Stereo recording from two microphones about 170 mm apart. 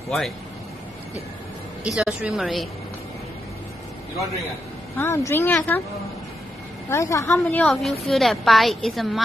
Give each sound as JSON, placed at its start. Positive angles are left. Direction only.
{"t": 1.9, "sound": "a woman's voice", "side_deg": -5}
{"t": 4.9, "sound": "speech", "side_deg": 15}
{"t": 6.9, "sound": "speech", "side_deg": 20}
{"t": 7.4, "sound": "a woman's voice", "side_deg": 5}